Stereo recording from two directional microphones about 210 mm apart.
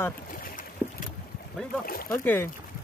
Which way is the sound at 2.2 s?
10° left (ahead or behind).